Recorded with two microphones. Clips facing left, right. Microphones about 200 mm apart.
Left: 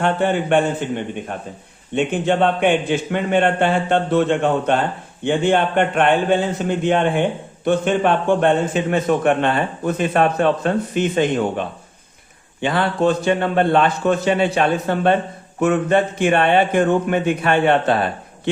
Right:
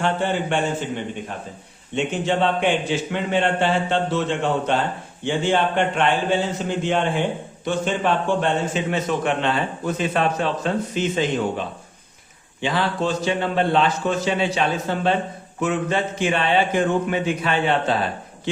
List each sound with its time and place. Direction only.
0.0 s a man's voice: 55° left (ahead or behind)
12.6 s a man's voice: 55° left (ahead or behind)